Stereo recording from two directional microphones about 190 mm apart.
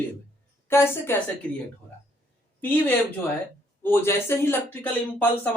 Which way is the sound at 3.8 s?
10° left (ahead or behind).